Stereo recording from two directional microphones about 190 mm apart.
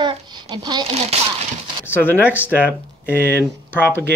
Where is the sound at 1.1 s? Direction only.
35° right (ahead or behind).